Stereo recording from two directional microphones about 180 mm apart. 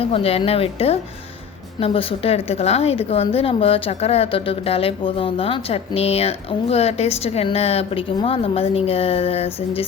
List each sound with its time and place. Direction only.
0.0 s a woman's voice: 30° left (ahead or behind)